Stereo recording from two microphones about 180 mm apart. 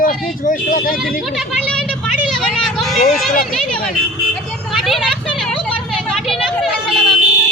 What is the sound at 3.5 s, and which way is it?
Speech, 5° left (ahead or behind).